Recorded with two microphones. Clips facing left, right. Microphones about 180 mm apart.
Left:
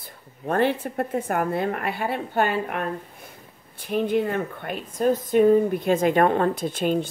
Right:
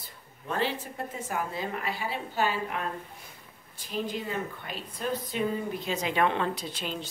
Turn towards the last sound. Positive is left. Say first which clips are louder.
# left 12 dB
turn(degrees=50)  # may be behind; listen again after turning